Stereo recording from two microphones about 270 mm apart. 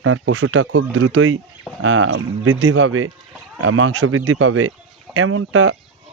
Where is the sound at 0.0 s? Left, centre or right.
Right.